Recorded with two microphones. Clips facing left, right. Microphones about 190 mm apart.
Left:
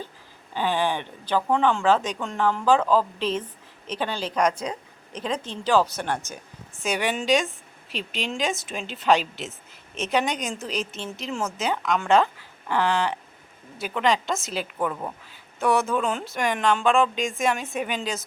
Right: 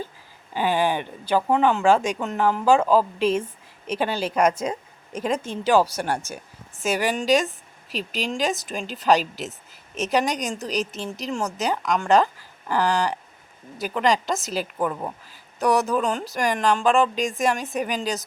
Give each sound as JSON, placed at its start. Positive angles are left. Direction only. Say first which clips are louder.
{"t": 0.5, "sound": "a woman's voice", "louder": "right 2 dB", "side_deg": -10}
{"t": 5.1, "sound": "speech", "louder": "right 4 dB", "side_deg": -45}
{"t": 5.6, "sound": "a woman's voice", "louder": "right 2 dB", "side_deg": -10}
{"t": 9.5, "sound": "a woman's voice", "louder": "right 1 dB", "side_deg": -40}
{"t": 10.1, "sound": "speech", "louder": "right 2 dB", "side_deg": 0}
{"t": 10.7, "sound": "a woman's voice", "louder": "right 3 dB", "side_deg": -40}
{"t": 11.6, "sound": "speech", "louder": "right 1 dB", "side_deg": 0}
{"t": 17.2, "sound": "a woman's voice", "louder": "right 2 dB", "side_deg": -40}
{"t": 17.4, "sound": "speech", "louder": "right 1 dB", "side_deg": 0}